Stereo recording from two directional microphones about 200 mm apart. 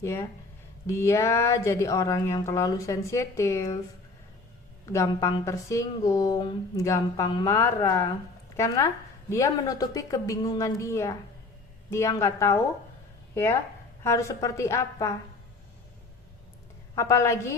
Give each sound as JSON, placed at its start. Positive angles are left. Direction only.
{"t": 0.0, "sound": "speech", "side_deg": 15}
{"t": 4.9, "sound": "speech", "side_deg": 15}
{"t": 16.9, "sound": "speech", "side_deg": 15}